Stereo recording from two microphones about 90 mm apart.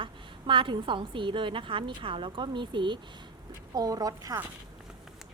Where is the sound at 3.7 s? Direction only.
45° right (ahead or behind).